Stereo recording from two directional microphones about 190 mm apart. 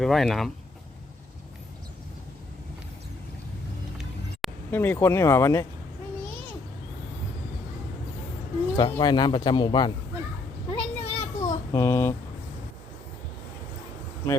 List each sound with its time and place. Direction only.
0.0 s speech: centre (ahead or behind)
3.9 s music: centre (ahead or behind)
4.7 s speech: 10° left (ahead or behind)
8.7 s speech: 20° left (ahead or behind)
10.7 s a sound: 35° left (ahead or behind)
11.3 s a sound: 15° left (ahead or behind)